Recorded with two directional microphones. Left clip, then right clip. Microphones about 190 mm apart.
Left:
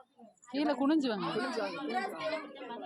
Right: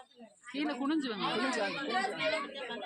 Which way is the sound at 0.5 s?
65° left (ahead or behind).